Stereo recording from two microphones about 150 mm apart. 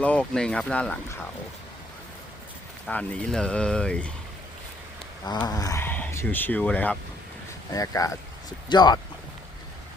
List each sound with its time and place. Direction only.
0.0 s speech: 10° left (ahead or behind)
2.8 s speech: 5° left (ahead or behind)
5.5 s speech: 25° left (ahead or behind)
7.7 s speech: 20° left (ahead or behind)